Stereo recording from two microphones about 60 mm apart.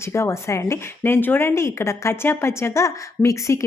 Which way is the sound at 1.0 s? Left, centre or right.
Left.